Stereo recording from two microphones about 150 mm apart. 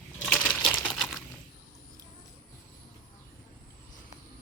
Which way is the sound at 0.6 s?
10° left (ahead or behind).